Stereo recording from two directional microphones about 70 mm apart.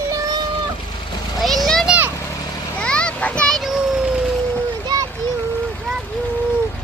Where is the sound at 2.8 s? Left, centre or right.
Centre.